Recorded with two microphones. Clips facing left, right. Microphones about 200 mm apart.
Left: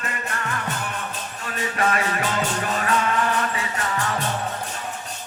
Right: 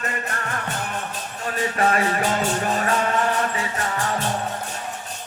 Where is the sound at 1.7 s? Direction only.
35° right (ahead or behind).